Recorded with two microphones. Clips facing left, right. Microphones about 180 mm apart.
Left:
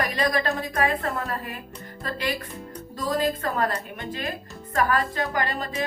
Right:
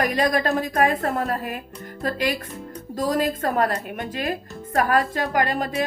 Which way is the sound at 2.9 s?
45° right (ahead or behind).